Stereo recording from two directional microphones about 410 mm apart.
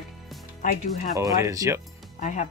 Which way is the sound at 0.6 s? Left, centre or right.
Centre.